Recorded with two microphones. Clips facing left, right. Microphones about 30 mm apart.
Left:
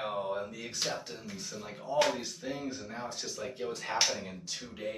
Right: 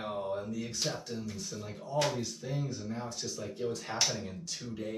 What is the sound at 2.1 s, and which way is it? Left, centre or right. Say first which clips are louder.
Speech: right 1 dB; left.